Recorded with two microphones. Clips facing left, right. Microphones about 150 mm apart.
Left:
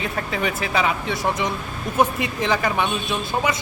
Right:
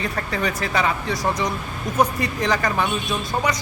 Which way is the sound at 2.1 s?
20° left (ahead or behind).